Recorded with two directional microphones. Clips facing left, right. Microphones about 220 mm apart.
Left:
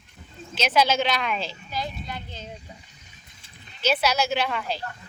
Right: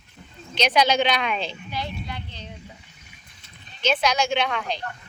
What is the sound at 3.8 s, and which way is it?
Speech, 5° left (ahead or behind).